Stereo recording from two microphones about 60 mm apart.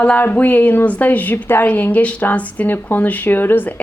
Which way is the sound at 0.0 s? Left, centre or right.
Left.